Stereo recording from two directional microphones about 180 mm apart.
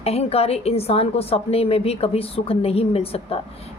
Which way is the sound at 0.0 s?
35° left (ahead or behind).